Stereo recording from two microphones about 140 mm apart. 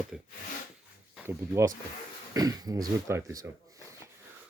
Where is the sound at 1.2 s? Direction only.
20° right (ahead or behind).